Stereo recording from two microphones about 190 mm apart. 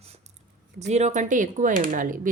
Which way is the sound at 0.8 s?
35° right (ahead or behind).